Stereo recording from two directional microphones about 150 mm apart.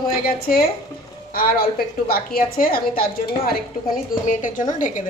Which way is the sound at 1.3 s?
80° left.